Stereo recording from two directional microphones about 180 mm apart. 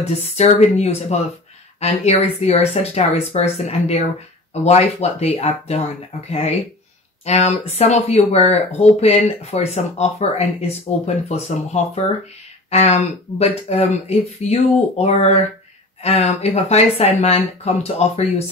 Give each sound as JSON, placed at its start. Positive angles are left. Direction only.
{"t": 0.0, "sound": "speech", "side_deg": 35}